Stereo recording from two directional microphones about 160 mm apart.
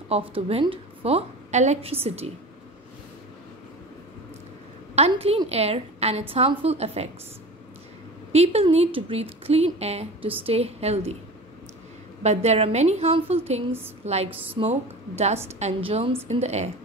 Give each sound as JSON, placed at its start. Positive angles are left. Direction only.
{"t": 0.1, "sound": "a woman's voice", "side_deg": -35}
{"t": 4.9, "sound": "a woman's voice", "side_deg": -40}
{"t": 8.3, "sound": "a woman's voice", "side_deg": -40}
{"t": 12.2, "sound": "a woman's voice", "side_deg": -45}